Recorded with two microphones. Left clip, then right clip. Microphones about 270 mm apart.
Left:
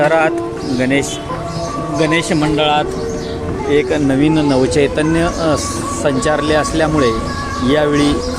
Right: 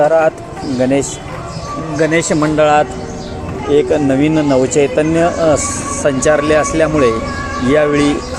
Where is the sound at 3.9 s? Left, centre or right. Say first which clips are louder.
Right 1 dB; centre.